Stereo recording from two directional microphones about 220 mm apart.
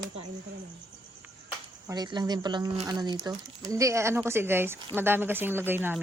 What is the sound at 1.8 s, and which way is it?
Speech, 20° right (ahead or behind).